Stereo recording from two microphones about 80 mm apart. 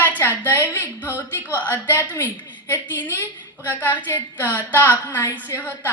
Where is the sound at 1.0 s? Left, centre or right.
Right.